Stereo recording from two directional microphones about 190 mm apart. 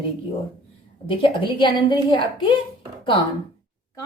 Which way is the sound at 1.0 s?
25° left (ahead or behind).